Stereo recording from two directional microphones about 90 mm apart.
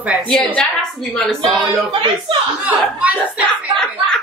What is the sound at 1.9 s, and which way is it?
Speech, 65° right (ahead or behind).